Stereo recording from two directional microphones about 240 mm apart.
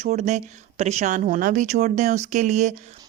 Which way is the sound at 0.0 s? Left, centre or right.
Right.